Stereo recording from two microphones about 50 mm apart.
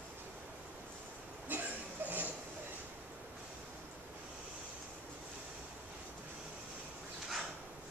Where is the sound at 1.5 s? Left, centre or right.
Right.